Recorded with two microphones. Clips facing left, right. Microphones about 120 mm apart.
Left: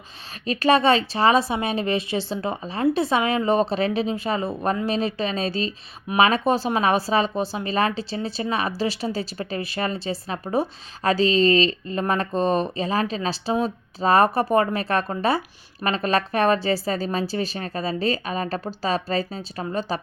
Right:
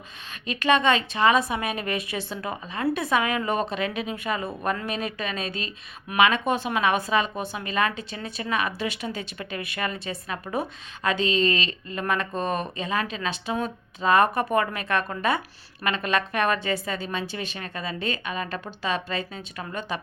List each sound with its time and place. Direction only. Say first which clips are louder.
0.4 s a woman's voice: left 3 dB; 35° left (ahead or behind)